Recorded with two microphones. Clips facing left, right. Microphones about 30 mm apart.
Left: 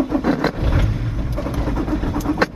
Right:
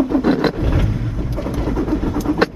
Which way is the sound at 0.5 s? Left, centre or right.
Centre.